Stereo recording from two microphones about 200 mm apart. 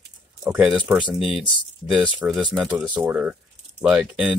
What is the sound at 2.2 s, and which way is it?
Speech, 20° right (ahead or behind).